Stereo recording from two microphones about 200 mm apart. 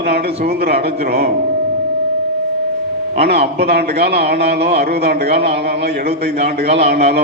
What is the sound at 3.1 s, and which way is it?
A man's voice, 55° right (ahead or behind).